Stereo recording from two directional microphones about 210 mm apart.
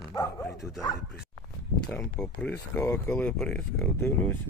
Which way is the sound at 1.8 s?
5° left (ahead or behind).